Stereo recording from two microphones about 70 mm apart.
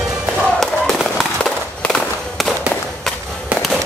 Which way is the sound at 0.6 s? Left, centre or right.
Centre.